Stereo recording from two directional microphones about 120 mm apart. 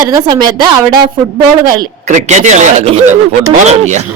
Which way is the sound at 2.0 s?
90° right.